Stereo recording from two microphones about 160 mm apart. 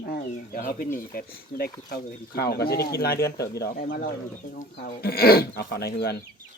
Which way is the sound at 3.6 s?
65° left (ahead or behind).